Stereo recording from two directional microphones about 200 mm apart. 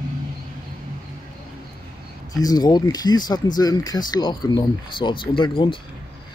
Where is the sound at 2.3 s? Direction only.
20° left (ahead or behind).